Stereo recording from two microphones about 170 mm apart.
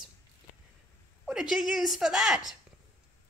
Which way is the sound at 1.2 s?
5° right (ahead or behind).